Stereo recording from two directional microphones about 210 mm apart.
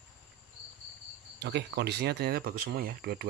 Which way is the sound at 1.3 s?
55° right (ahead or behind).